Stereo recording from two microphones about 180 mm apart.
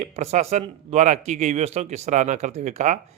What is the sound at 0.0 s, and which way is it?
Speech, 40° right (ahead or behind).